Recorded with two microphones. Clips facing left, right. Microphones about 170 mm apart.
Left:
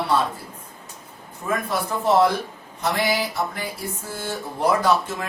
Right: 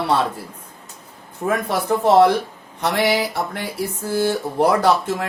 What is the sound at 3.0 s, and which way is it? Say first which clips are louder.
Speech: right 5 dB; 70° right (ahead or behind).